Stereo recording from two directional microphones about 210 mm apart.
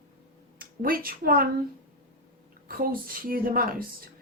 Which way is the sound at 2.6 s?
45° right (ahead or behind).